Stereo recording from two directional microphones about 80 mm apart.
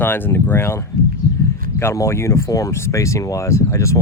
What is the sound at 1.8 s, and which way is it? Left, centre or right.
Speech, left.